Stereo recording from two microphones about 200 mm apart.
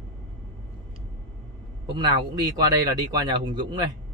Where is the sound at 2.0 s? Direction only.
20° right (ahead or behind).